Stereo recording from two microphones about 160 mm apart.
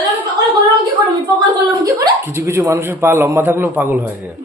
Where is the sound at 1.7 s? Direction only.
20° right (ahead or behind).